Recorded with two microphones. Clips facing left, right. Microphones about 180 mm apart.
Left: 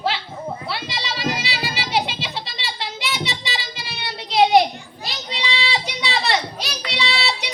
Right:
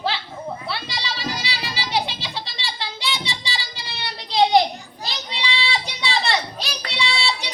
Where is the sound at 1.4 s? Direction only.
20° left (ahead or behind).